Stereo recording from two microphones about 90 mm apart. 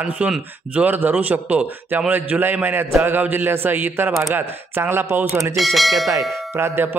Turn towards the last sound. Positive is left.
turn(degrees=-25)  # may be behind; listen again after turning